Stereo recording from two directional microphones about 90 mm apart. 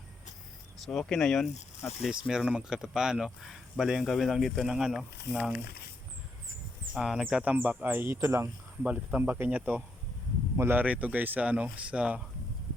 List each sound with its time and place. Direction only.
0.8 s speech: 5° left (ahead or behind)
6.9 s speech: 5° right (ahead or behind)
7.9 s speech: 25° right (ahead or behind)
8.8 s speech: 15° right (ahead or behind)